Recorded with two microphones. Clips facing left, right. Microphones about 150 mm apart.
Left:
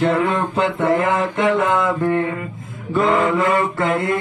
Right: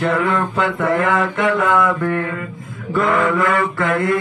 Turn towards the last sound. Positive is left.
turn(degrees=20)  # may be behind; listen again after turning